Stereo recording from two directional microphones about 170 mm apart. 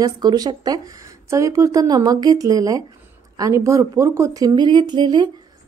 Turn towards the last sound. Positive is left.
turn(degrees=-25)  # may be behind; listen again after turning